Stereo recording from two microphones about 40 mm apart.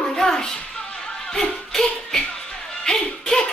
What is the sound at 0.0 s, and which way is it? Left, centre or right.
Music, centre.